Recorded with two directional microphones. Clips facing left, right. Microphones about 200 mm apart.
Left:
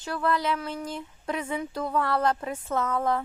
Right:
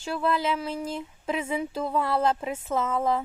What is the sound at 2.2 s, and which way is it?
Speech, 25° right (ahead or behind).